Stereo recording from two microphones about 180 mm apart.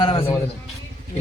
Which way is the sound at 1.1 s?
35° left (ahead or behind).